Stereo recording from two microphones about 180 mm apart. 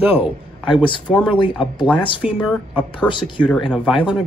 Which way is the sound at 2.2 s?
5° right (ahead or behind).